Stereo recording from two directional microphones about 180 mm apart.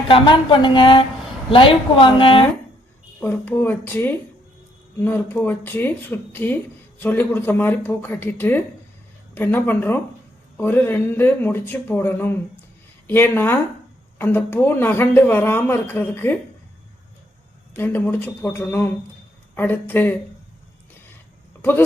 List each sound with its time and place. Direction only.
0.1 s a woman's voice: 25° left (ahead or behind)
3.2 s speech: 10° left (ahead or behind)
17.7 s speech: 10° left (ahead or behind)
21.6 s speech: 10° left (ahead or behind)